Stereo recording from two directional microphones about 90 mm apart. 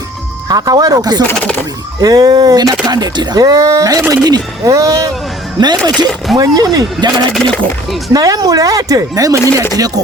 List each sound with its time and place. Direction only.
0.4 s speech: 45° right (ahead or behind)
1.2 s speech: 15° left (ahead or behind)
2.0 s speech: 45° right (ahead or behind)
5.5 s speech: 50° right (ahead or behind)
8.1 s speech: 40° right (ahead or behind)